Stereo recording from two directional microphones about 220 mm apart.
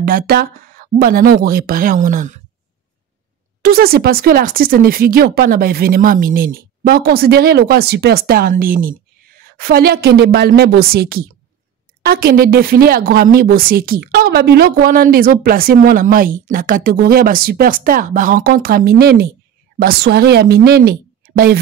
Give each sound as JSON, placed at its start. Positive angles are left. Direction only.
{"t": 0.0, "sound": "a woman's voice", "side_deg": -40}
{"t": 3.6, "sound": "a woman's voice", "side_deg": -45}